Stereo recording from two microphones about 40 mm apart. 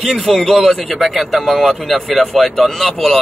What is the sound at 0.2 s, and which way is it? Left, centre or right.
Speech, centre.